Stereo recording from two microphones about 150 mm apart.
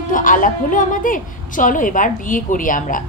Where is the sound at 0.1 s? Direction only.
65° left (ahead or behind).